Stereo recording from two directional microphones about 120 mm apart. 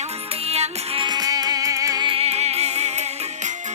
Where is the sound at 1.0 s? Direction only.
35° right (ahead or behind).